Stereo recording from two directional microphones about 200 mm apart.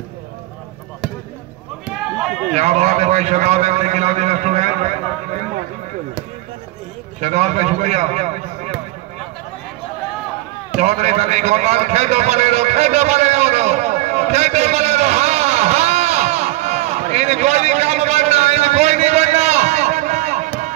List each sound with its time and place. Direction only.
1.9 s run: centre (ahead or behind)
2.5 s a man's voice: 35° right (ahead or behind)
7.2 s a man's voice: 35° right (ahead or behind)
10.8 s a sound: 35° right (ahead or behind)